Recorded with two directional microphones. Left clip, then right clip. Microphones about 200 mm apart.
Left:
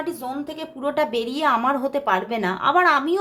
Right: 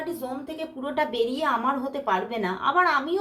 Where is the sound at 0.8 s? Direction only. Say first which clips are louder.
Left 3 dB; 40° left (ahead or behind).